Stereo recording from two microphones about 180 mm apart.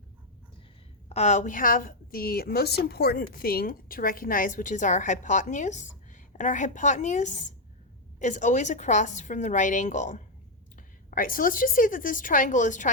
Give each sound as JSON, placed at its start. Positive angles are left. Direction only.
{"t": 1.1, "sound": "a woman's voice", "side_deg": 40}